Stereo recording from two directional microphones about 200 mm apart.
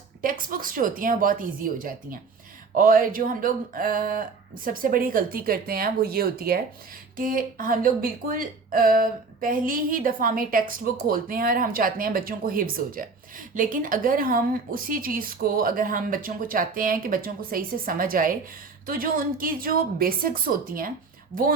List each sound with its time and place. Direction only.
0.2 s speech: 45° right (ahead or behind)